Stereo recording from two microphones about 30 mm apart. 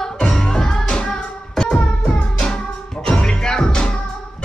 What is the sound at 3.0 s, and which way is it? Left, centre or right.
Music, left.